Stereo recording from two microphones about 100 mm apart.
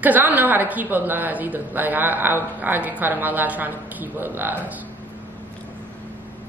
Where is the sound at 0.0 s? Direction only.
15° right (ahead or behind).